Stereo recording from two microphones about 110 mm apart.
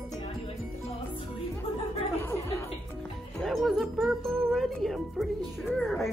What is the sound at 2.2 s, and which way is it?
Music, 25° left (ahead or behind).